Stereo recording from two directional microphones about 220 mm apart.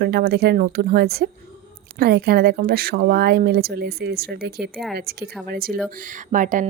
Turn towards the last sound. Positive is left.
turn(degrees=-35)  # may be behind; listen again after turning